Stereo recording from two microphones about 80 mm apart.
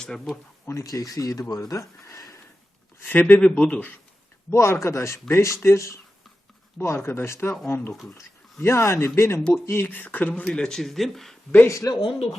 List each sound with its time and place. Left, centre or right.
0.0 s speech: centre
0.7 s speech: left
3.0 s speech: left
4.5 s speech: left; by 11.3 s centre
11.6 s speech: left